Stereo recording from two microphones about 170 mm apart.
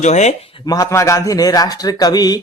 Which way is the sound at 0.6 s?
20° left (ahead or behind).